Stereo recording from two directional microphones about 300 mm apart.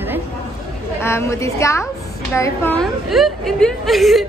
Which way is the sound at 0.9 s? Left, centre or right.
Centre.